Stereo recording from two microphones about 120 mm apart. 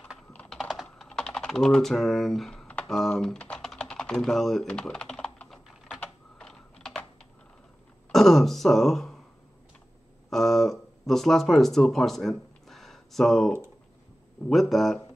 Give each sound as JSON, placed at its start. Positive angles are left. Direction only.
{"t": 0.5, "sound": "typing", "side_deg": 0}
{"t": 8.1, "sound": "throat clearing", "side_deg": 0}
{"t": 10.3, "sound": "a sound", "side_deg": 0}
{"t": 14.5, "sound": "speech", "side_deg": 0}